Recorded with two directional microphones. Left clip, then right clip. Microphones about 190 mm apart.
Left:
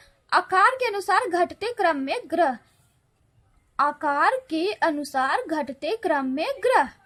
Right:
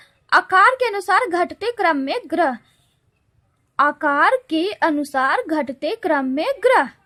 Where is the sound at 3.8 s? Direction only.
35° right (ahead or behind).